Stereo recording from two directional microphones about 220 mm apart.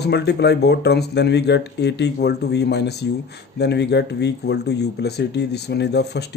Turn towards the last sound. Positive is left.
turn(degrees=50)  # may be behind; listen again after turning